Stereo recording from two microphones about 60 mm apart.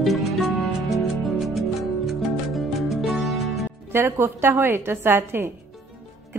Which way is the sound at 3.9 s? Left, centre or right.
Right.